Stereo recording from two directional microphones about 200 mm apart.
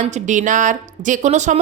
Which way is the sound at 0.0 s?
35° right (ahead or behind).